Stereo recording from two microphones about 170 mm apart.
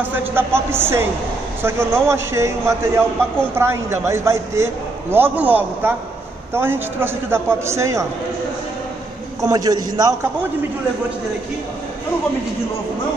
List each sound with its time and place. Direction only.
0.0 s a man's voice: 10° right (ahead or behind)
9.4 s a man's voice: 20° right (ahead or behind)